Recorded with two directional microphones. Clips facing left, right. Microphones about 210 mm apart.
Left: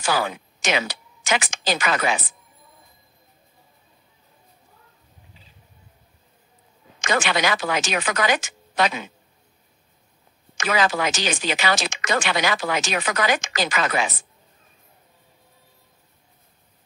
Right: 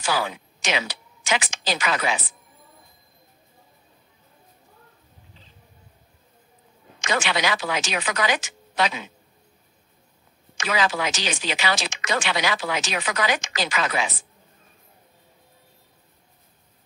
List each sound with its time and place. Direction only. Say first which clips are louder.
0.0 s speech: left 2 dB; 50° left (ahead or behind)
7.0 s speech: left 2 dB; 50° left (ahead or behind)
10.6 s speech: left 2 dB; 50° left (ahead or behind)